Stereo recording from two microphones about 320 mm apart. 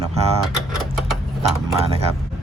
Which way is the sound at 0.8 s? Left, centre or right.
Centre.